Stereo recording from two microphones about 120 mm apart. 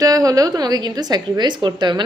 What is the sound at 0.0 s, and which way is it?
A woman's voice, 30° right (ahead or behind).